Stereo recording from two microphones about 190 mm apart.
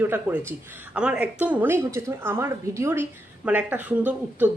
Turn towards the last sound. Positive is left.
turn(degrees=-10)  # may be behind; listen again after turning